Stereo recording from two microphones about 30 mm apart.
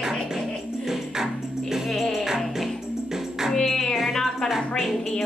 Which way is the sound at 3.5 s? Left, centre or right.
Centre.